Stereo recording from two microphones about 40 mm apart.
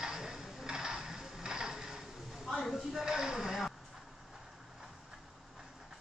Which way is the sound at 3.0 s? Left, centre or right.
Centre.